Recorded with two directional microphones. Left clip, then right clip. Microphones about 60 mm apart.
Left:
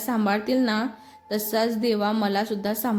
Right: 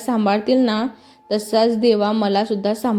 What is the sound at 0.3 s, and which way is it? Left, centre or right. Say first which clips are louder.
A woman's voice: right 7 dB; right.